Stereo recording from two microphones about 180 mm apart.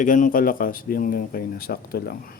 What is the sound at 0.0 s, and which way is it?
Speech, 45° left (ahead or behind).